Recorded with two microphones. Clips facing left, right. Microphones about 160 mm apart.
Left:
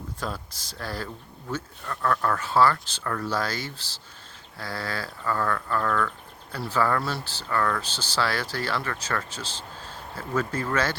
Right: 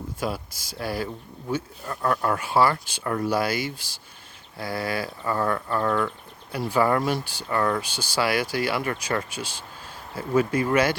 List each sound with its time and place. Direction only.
0.2 s speech: 10° right (ahead or behind)
6.5 s speech: 15° right (ahead or behind)